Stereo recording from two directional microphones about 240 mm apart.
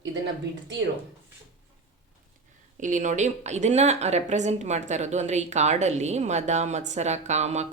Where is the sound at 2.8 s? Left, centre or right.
Right.